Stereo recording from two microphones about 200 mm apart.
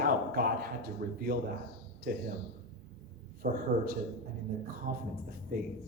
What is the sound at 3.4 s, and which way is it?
Speech, 40° right (ahead or behind).